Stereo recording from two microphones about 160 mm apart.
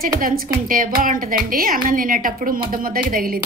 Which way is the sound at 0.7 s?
60° right (ahead or behind).